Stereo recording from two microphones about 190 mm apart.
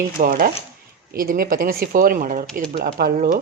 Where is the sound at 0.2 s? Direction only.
50° right (ahead or behind).